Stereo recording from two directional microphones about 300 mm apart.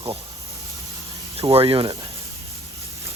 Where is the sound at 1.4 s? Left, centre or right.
Centre.